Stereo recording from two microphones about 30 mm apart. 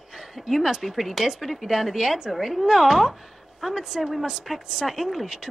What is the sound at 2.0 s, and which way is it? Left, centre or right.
Speech, centre.